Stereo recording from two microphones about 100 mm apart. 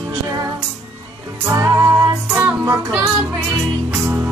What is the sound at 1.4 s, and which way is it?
Music, 30° right (ahead or behind).